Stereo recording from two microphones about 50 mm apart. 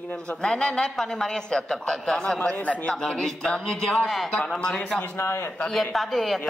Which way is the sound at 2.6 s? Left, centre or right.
Left.